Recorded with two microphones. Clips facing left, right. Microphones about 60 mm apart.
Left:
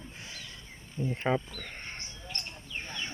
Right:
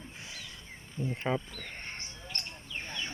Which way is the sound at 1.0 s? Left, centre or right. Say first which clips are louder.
Left 2 dB; left.